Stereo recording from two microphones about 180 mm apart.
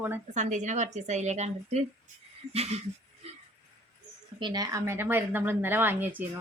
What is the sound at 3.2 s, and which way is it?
Dog, 35° right (ahead or behind).